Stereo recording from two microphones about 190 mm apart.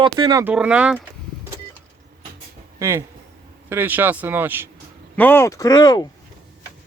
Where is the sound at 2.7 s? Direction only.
15° right (ahead or behind).